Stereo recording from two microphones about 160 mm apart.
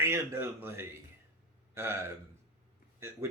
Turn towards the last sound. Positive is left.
turn(degrees=-15)  # may be behind; listen again after turning